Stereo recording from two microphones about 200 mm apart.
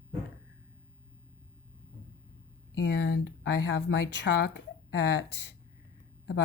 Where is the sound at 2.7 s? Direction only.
60° left (ahead or behind).